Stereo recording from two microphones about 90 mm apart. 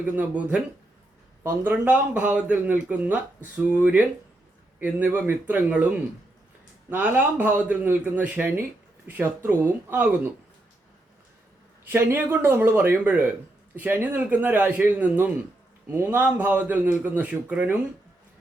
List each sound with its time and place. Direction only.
0.0 s a man's voice: 15° right (ahead or behind)
6.9 s a man's voice: 20° right (ahead or behind)
11.9 s a man's voice: 20° right (ahead or behind)